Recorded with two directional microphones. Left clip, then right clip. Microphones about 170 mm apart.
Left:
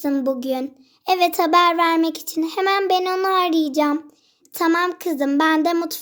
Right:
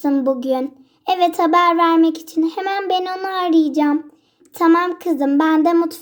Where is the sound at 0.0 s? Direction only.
10° left (ahead or behind).